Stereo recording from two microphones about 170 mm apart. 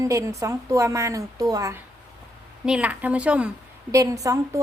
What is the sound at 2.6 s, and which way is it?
Speech, 5° right (ahead or behind).